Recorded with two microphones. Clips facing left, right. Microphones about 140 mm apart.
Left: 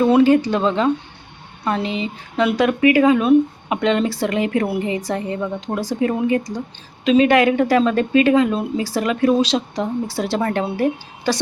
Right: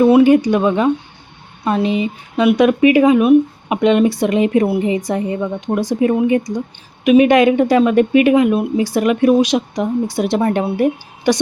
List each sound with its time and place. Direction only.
0.0 s speech: 15° right (ahead or behind)